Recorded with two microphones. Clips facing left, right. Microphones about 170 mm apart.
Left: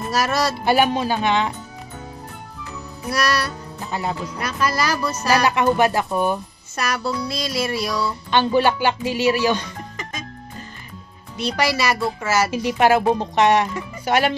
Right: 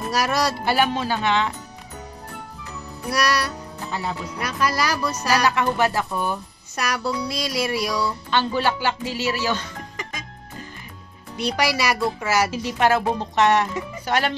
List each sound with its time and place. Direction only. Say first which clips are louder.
0.1 s music: left 1 dB; 15° right (ahead or behind)
0.7 s speech: left 6 dB; 15° left (ahead or behind)
3.1 s music: left 1 dB; 15° right (ahead or behind)
5.3 s speech: left 3 dB; 15° left (ahead or behind)
7.1 s music: left 1 dB; 15° right (ahead or behind)
8.3 s speech: left 6 dB; 15° left (ahead or behind)
11.3 s music: left 1 dB; 15° right (ahead or behind)
12.4 s speech: left 3 dB; 15° left (ahead or behind)